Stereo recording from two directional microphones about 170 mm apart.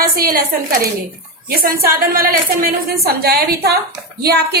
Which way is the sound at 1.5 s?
60° right (ahead or behind).